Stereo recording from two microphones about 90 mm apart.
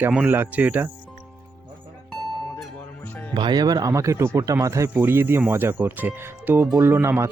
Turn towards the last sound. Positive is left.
turn(degrees=-25)  # may be behind; listen again after turning